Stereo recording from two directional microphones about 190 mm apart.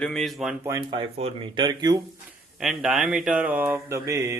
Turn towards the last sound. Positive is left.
turn(degrees=-15)  # may be behind; listen again after turning